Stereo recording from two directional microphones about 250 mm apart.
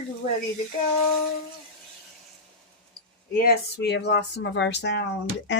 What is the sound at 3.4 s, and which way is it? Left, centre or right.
Speech, left.